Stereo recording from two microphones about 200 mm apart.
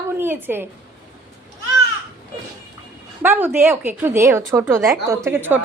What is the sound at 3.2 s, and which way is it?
Speech, 10° right (ahead or behind).